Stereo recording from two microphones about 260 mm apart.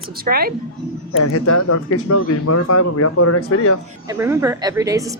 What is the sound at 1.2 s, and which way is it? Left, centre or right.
Speech, left.